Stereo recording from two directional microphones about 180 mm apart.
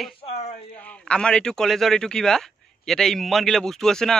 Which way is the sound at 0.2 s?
30° left (ahead or behind).